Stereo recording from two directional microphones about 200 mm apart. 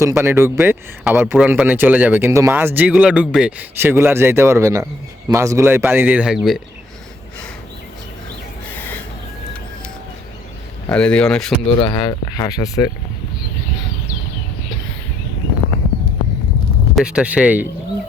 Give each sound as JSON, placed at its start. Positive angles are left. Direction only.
{"t": 0.0, "sound": "a man's voice", "side_deg": -15}
{"t": 10.8, "sound": "speech", "side_deg": 5}
{"t": 11.8, "sound": "speech", "side_deg": 20}
{"t": 16.9, "sound": "speech", "side_deg": -5}